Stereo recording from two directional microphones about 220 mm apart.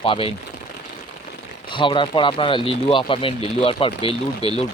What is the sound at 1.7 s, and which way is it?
Speech, 20° left (ahead or behind).